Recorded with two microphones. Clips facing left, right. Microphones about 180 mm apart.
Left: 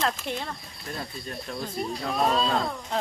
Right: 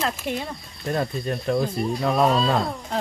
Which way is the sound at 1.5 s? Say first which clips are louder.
Right 8 dB; 70° right (ahead or behind).